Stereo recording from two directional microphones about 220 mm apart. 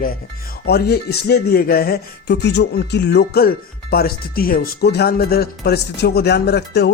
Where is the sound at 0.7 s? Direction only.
45° left (ahead or behind).